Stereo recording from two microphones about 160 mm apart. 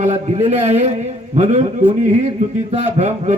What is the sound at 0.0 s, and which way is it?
A man's voice, 40° right (ahead or behind).